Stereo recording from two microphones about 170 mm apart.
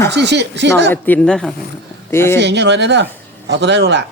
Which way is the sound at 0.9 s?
10° left (ahead or behind).